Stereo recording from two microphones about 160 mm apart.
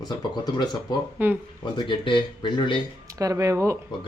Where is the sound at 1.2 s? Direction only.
10° right (ahead or behind).